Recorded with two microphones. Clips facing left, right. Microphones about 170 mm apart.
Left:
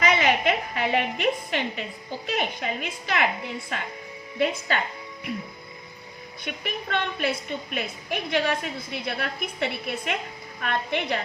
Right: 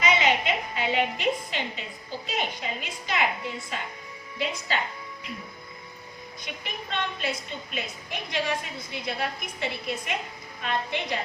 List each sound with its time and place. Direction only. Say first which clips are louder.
0.0 s a woman's voice: left 2 dB; 60° left (ahead or behind)
6.4 s a woman's voice: left 6 dB; 65° left (ahead or behind)